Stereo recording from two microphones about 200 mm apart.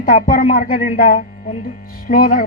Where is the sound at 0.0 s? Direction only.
45° left (ahead or behind).